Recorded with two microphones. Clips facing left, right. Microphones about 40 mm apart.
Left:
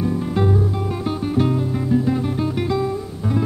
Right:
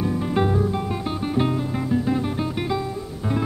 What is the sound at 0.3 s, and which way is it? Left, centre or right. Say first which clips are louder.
Music: right 1 dB; centre.